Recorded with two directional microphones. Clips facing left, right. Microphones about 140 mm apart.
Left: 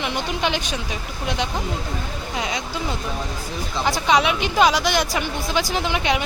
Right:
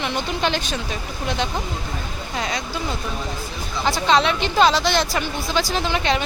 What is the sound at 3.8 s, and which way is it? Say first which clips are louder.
A woman's voice: right 1 dB; 15° left (ahead or behind).